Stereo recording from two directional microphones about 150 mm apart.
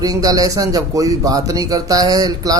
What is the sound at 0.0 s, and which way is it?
Speech, 25° right (ahead or behind).